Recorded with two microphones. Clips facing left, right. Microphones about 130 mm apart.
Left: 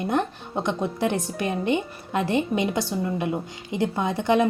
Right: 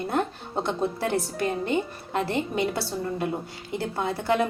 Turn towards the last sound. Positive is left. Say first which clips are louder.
# left 3 dB
turn(degrees=20)  # may be behind; listen again after turning